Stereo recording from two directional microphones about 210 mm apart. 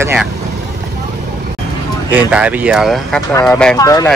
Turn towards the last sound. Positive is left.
turn(degrees=15)  # may be behind; listen again after turning